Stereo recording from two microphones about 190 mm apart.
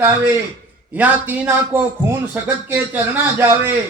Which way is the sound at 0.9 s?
10° right (ahead or behind).